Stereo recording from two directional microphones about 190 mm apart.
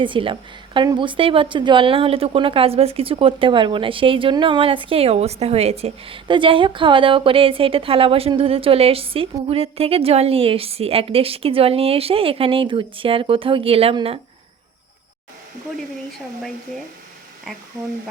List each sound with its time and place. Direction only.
0.0 s a woman's voice: 25° right (ahead or behind)